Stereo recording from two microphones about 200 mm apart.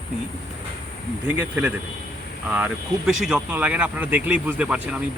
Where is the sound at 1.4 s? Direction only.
10° right (ahead or behind).